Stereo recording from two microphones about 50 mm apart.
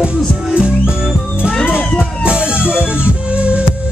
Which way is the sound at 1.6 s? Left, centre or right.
Left.